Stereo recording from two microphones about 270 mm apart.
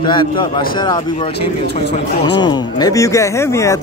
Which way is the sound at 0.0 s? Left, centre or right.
Centre.